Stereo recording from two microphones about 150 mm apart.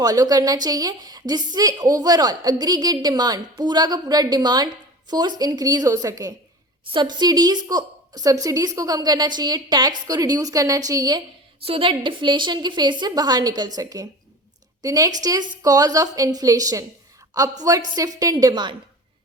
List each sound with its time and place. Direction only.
0.0 s a woman's voice: 25° right (ahead or behind)
11.6 s a woman's voice: 40° right (ahead or behind)